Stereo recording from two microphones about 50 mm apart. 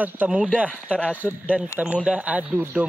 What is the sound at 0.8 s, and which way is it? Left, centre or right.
Speech, left.